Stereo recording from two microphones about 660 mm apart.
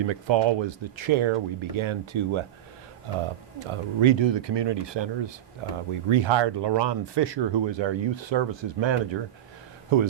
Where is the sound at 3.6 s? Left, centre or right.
Right.